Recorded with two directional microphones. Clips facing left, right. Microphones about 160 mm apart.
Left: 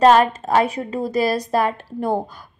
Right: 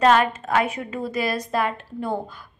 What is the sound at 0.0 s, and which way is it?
A woman's voice, 35° left (ahead or behind).